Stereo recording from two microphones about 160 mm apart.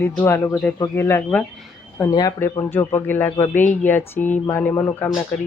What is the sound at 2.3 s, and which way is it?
Mantra, 15° left (ahead or behind).